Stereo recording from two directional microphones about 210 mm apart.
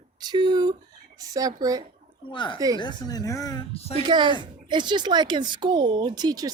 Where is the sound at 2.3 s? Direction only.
25° left (ahead or behind).